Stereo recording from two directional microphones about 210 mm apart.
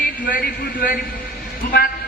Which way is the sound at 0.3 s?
40° left (ahead or behind).